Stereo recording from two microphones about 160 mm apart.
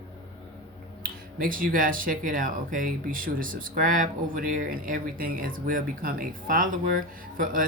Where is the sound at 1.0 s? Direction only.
60° right (ahead or behind).